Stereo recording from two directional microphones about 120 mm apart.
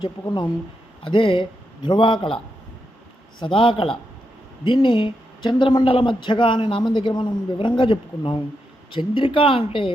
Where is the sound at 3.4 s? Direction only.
45° left (ahead or behind).